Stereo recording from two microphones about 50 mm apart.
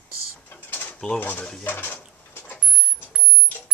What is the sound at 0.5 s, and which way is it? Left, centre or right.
Mechanisms, left.